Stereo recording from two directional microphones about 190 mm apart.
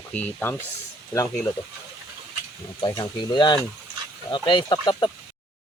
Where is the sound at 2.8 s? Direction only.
25° left (ahead or behind).